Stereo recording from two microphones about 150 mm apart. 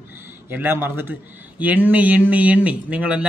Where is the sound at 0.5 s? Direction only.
15° right (ahead or behind).